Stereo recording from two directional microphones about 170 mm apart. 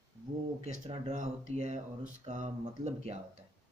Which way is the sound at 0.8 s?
45° right (ahead or behind).